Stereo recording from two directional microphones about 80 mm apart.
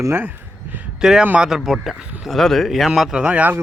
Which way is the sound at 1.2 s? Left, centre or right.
Centre.